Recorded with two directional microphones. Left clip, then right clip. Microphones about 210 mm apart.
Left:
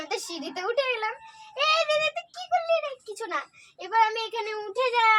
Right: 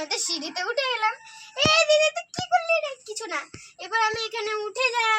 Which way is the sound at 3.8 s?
25° left (ahead or behind).